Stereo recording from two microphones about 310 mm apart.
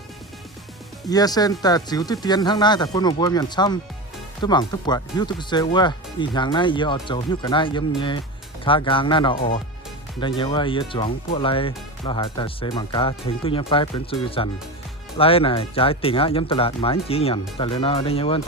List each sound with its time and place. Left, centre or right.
1.1 s speech: centre